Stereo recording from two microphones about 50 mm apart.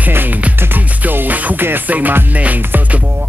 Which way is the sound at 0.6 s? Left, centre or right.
Right.